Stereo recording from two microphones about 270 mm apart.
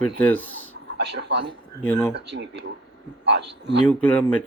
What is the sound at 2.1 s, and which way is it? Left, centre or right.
A man's voice, right.